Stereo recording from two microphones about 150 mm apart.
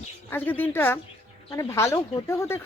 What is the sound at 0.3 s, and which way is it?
Speech, 15° left (ahead or behind).